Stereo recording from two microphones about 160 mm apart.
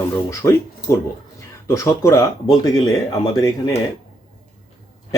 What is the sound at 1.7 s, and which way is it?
Speech, 20° left (ahead or behind).